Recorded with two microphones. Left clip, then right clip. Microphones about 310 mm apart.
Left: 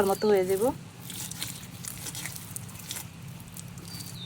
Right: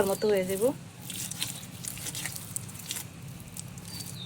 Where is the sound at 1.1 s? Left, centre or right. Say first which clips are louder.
Right 2 dB; centre.